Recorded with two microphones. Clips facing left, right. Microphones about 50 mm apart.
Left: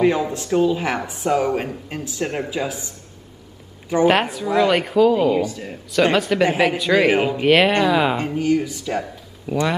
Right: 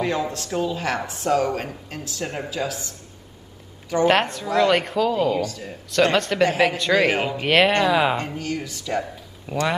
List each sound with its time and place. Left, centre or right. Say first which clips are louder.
0.0 s speech: left 6 dB; centre
0.5 s a woman's voice: left 8 dB; centre
4.1 s a woman's voice: left 2 dB; centre
6.1 s a woman's voice: left 2 dB; centre
8.4 s a woman's voice: left 9 dB; centre
9.0 s speech: left 3 dB; centre